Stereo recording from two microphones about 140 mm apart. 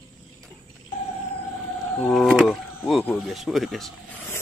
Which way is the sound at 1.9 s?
5° left (ahead or behind).